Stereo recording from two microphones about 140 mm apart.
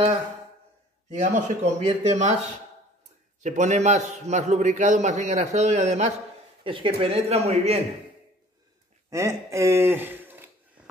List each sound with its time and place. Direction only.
1.2 s a man's voice: 60° right (ahead or behind)
3.4 s a man's voice: 60° right (ahead or behind)
6.6 s speech: 40° right (ahead or behind)
9.1 s speech: 20° right (ahead or behind)